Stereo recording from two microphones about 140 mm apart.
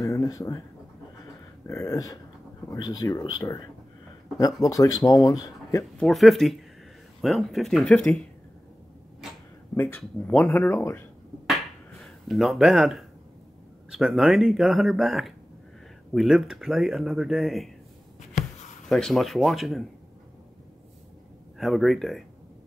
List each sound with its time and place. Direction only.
0.0 s a sound: 25° left (ahead or behind)
1.7 s speech: 20° left (ahead or behind)
5.9 s speech: centre (ahead or behind)
9.8 s speech: 15° left (ahead or behind)
12.0 s speech: centre (ahead or behind)
18.9 s speech: 5° left (ahead or behind)
21.5 s speech: centre (ahead or behind)